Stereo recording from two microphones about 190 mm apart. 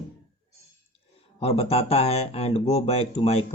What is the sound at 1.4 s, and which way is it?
Speech, 30° left (ahead or behind).